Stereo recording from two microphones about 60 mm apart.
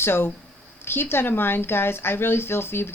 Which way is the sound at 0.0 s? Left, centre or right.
Left.